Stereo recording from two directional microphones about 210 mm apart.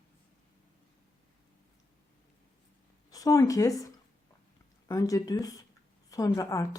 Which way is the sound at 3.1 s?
15° left (ahead or behind).